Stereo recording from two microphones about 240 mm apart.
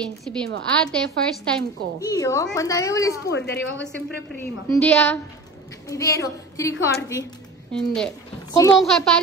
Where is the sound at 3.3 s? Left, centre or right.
Left.